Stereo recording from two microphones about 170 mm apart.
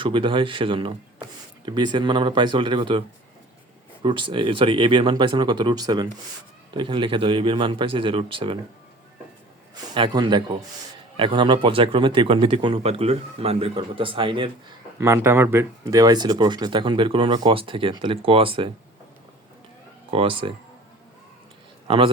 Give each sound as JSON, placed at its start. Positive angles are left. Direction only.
{"t": 0.0, "sound": "speech", "side_deg": -30}
{"t": 4.0, "sound": "speech", "side_deg": -30}
{"t": 9.9, "sound": "speech", "side_deg": -25}
{"t": 14.9, "sound": "speech", "side_deg": -15}
{"t": 20.1, "sound": "speech", "side_deg": -30}
{"t": 21.8, "sound": "a man's voice", "side_deg": -30}